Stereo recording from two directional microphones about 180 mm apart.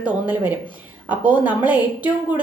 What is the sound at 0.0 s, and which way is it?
A woman's voice, 10° right (ahead or behind).